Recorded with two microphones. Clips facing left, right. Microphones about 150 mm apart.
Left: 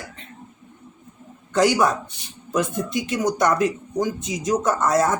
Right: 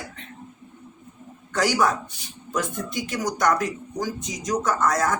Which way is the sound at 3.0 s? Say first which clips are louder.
Left 2 dB; 25° left (ahead or behind).